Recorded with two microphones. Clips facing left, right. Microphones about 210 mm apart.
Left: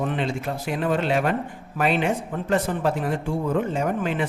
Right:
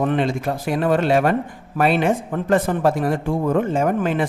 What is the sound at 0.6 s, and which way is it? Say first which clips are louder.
Speech: right 5 dB; 45° right (ahead or behind).